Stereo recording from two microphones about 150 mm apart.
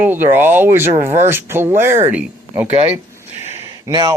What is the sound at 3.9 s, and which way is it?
Speech, 30° right (ahead or behind).